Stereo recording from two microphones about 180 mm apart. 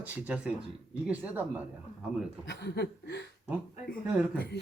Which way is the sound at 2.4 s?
70° left (ahead or behind).